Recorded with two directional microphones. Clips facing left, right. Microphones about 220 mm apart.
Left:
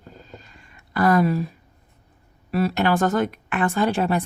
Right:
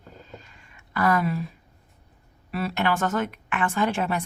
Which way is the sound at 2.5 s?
40° left (ahead or behind).